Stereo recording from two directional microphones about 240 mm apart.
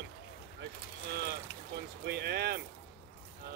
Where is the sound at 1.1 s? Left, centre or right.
Right.